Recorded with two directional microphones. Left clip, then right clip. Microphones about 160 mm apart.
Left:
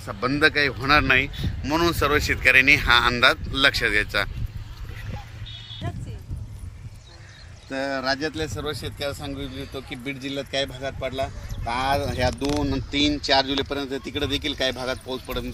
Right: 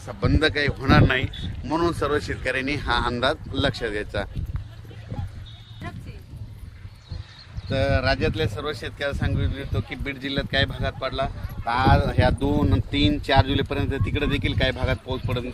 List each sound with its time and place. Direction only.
0.1 s speech: 15° right (ahead or behind); by 4.3 s 45° right (ahead or behind)
7.7 s speech: 50° right (ahead or behind)
8.0 s speech: 25° right (ahead or behind)
8.3 s speech: 5° right (ahead or behind)
9.7 s speech: 25° left (ahead or behind); by 12.3 s 50° left (ahead or behind)
12.4 s speech: 30° left (ahead or behind); by 15.4 s 5° left (ahead or behind)